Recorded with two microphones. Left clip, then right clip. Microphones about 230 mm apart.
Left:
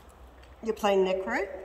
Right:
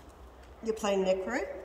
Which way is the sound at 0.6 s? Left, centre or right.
Centre.